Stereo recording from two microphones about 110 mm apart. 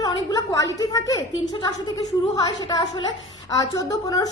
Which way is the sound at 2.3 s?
40° left (ahead or behind).